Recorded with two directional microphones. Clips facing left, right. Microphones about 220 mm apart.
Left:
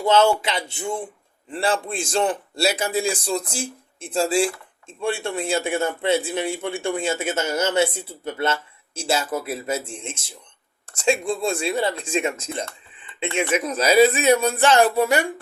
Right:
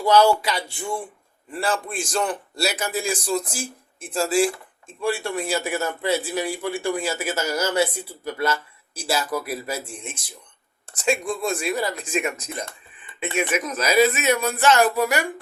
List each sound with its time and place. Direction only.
0.0 s a man's voice: 25° left (ahead or behind)